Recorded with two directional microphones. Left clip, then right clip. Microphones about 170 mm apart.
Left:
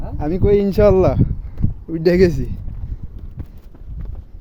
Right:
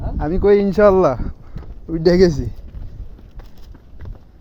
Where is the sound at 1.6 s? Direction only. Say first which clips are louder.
Left 11 dB; 25° right (ahead or behind).